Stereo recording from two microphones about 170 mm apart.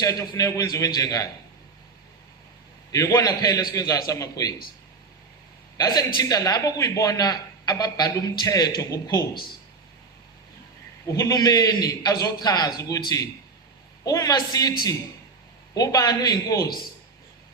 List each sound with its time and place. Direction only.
0.0 s speech: 20° left (ahead or behind)
2.9 s speech: 20° left (ahead or behind)
5.7 s a man's voice: 20° left (ahead or behind)
11.2 s speech: 20° left (ahead or behind)
14.0 s speech: 20° left (ahead or behind)
15.7 s speech: 20° left (ahead or behind)